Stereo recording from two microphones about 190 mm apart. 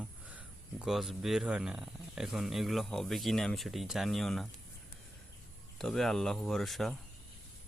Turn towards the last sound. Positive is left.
turn(degrees=0)  # may be behind; listen again after turning